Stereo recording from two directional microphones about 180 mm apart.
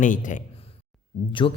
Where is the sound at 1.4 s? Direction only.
30° left (ahead or behind).